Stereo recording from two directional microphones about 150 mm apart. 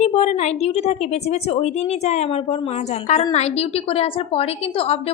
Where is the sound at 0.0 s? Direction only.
50° left (ahead or behind).